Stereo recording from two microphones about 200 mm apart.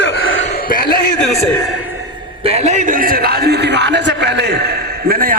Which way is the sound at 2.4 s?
35° right (ahead or behind).